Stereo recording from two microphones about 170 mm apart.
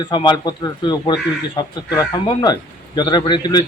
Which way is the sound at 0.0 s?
25° left (ahead or behind).